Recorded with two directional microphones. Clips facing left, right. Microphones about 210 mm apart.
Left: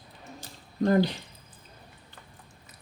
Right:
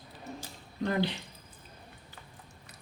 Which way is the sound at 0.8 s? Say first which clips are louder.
Left 7 dB; 40° left (ahead or behind).